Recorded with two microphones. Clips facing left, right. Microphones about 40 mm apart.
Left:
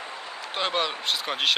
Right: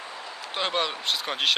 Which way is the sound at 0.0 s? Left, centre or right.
Left.